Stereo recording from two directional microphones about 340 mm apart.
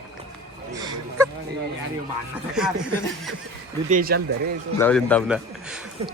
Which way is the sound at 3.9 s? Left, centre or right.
Right.